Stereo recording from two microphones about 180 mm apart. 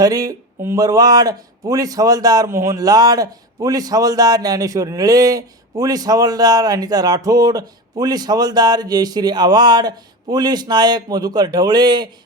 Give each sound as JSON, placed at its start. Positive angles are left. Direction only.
{"t": 0.0, "sound": "speech", "side_deg": -20}